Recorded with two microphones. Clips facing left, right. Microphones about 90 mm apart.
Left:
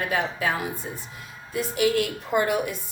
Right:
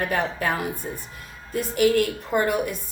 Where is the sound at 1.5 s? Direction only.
45° right (ahead or behind).